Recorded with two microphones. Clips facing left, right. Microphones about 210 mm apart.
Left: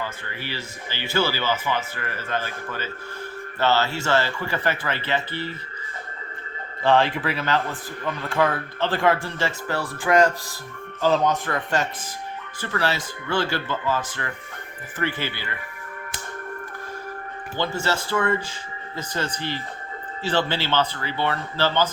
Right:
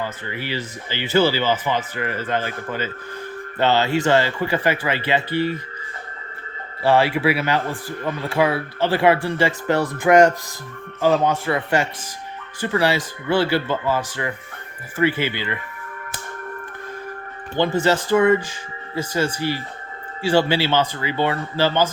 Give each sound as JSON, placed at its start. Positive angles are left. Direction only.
{"t": 0.0, "sound": "speech", "side_deg": -15}
{"t": 6.8, "sound": "speech", "side_deg": -10}
{"t": 17.6, "sound": "speech", "side_deg": -15}